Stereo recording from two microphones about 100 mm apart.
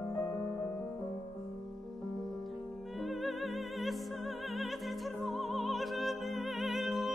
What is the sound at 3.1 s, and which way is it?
Music, centre (ahead or behind).